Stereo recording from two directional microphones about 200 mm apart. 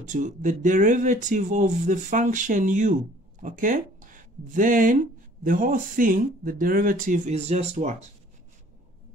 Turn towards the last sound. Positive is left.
turn(degrees=-35)  # may be behind; listen again after turning